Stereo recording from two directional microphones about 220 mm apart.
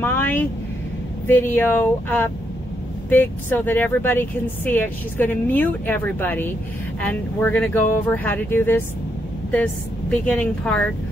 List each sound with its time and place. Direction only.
0.0 s a woman's voice: 10° left (ahead or behind)